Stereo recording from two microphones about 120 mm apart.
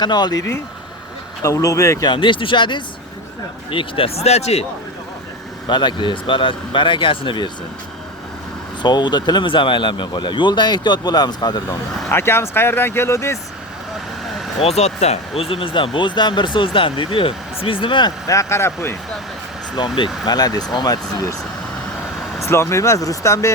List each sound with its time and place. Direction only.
0.0 s speech: 35° left (ahead or behind)
1.4 s speech: 25° left (ahead or behind)
2.0 s speech: 45° left (ahead or behind); by 4.6 s 65° left (ahead or behind)
5.6 s speech: 40° left (ahead or behind)
8.8 s speech: 40° left (ahead or behind)
12.0 s speech: 20° left (ahead or behind)
14.6 s speech: 60° left (ahead or behind); by 18.1 s 40° left (ahead or behind)
18.3 s speech: 25° left (ahead or behind)
19.7 s speech: 40° left (ahead or behind)
22.4 s speech: 20° left (ahead or behind)